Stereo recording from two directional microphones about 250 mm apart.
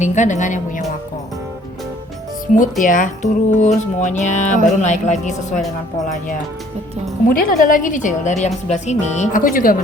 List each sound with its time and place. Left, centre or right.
0.0 s a woman's voice: left
2.5 s a woman's voice: left
7.3 s a woman's voice: left